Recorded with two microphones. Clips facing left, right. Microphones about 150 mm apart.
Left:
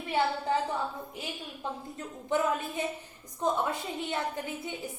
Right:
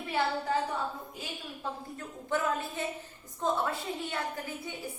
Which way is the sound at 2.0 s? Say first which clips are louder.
Left 4 dB; 15° left (ahead or behind).